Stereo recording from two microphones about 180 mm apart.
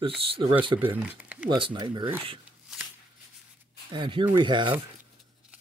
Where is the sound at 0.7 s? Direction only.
10° right (ahead or behind).